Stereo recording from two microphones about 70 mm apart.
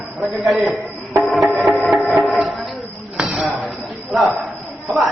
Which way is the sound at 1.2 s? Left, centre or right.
Centre.